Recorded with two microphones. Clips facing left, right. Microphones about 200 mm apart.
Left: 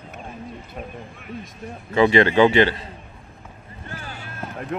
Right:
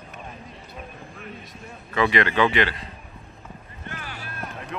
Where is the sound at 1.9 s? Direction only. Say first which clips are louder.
Left 6 dB; 30° left (ahead or behind).